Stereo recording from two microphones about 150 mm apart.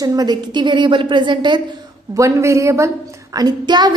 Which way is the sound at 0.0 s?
25° right (ahead or behind).